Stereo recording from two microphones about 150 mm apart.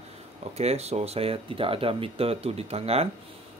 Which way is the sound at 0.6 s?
45° right (ahead or behind).